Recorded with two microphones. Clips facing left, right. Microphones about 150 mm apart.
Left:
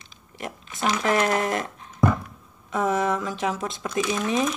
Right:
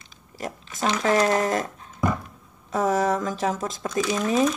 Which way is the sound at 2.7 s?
40° right (ahead or behind).